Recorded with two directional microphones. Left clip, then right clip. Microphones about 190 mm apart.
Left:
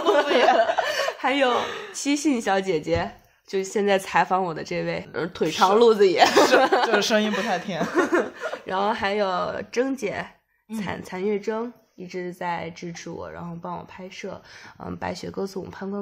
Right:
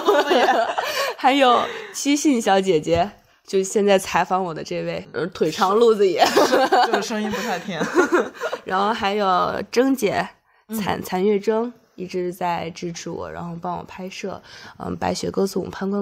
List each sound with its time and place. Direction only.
0.0 s snicker: 35° right (ahead or behind)
0.8 s chuckle: 45° right (ahead or behind)
1.6 s speech: 5° left (ahead or behind)
2.0 s speech: 30° right (ahead or behind)
7.0 s speech: 20° left (ahead or behind)
7.2 s speech: 30° right (ahead or behind)
7.5 s speech: centre (ahead or behind)
7.8 s speech: 35° right (ahead or behind)